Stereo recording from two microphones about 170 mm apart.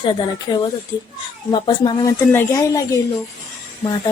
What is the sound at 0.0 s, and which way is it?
Speech, 30° left (ahead or behind).